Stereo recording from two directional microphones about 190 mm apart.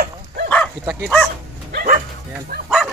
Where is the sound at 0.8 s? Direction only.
Centre (ahead or behind).